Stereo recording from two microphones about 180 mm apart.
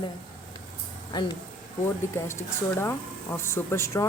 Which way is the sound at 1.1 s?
25° left (ahead or behind).